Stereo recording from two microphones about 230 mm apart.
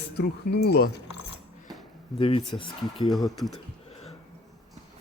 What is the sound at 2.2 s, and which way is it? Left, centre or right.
Speech, left.